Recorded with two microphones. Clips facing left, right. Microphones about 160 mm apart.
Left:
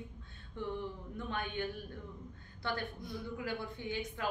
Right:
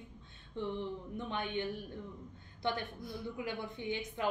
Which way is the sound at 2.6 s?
20° right (ahead or behind).